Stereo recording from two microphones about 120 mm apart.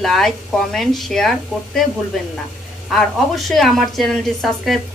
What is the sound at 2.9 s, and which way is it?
A woman's voice, centre (ahead or behind).